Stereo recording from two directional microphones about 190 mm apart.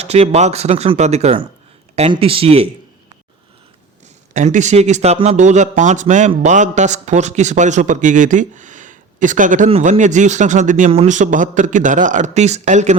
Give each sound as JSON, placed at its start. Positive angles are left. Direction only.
{"t": 0.0, "sound": "a man's voice", "side_deg": -35}
{"t": 4.4, "sound": "a man's voice", "side_deg": -40}
{"t": 9.6, "sound": "a man's voice", "side_deg": -30}